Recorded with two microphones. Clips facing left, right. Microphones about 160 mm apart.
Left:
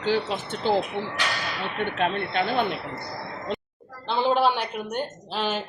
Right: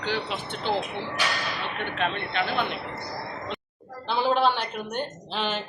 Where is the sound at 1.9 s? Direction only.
40° left (ahead or behind).